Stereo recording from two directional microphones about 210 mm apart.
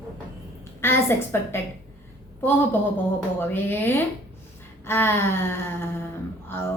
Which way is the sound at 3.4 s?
10° left (ahead or behind).